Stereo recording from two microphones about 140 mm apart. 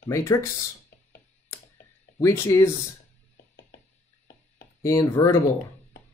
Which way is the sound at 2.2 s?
20° left (ahead or behind).